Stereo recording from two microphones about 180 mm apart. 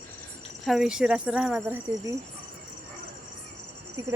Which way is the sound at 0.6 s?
Centre (ahead or behind).